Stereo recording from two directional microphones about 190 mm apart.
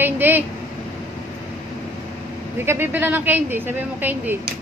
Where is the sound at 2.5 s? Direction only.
10° right (ahead or behind).